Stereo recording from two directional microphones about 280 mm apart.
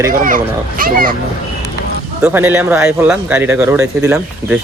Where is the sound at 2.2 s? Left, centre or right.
Centre.